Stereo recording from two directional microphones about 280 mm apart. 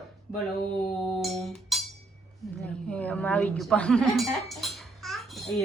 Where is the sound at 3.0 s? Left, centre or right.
Centre.